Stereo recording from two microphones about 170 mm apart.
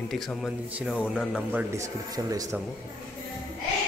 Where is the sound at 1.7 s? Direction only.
20° right (ahead or behind).